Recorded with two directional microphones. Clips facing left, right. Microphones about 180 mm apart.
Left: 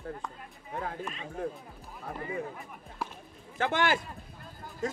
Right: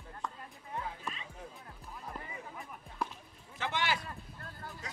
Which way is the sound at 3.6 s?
50° left (ahead or behind).